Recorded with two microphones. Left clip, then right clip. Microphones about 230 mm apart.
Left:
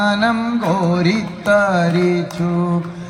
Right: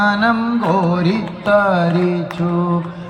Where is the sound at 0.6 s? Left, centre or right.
Left.